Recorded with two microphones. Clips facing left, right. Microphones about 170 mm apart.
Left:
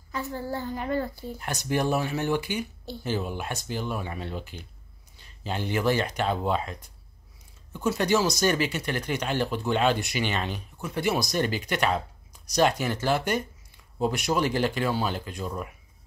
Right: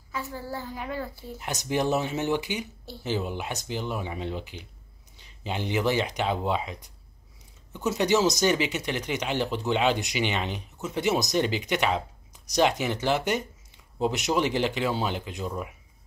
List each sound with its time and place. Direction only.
0.1 s a child's voice: 5° right (ahead or behind)
1.4 s speech: 20° right (ahead or behind)
2.8 s speech: centre (ahead or behind)
3.1 s speech: 15° right (ahead or behind)